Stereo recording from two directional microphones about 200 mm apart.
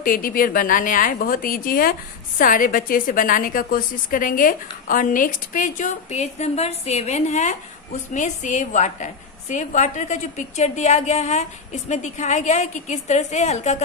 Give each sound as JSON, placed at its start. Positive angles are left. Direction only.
{"t": 0.0, "sound": "a woman's voice", "side_deg": 45}